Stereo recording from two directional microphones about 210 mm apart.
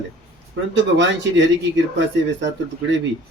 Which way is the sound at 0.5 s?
60° right (ahead or behind).